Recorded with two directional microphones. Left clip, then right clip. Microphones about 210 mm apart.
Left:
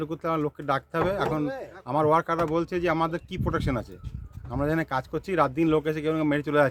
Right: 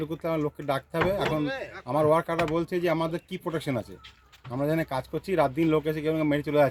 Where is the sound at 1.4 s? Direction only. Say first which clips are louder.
Right 1 dB; 40° left (ahead or behind).